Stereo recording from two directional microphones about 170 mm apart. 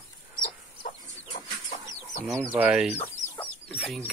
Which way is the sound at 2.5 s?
10° right (ahead or behind).